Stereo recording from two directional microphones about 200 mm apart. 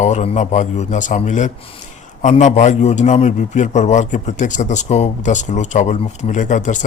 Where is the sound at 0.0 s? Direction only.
35° left (ahead or behind).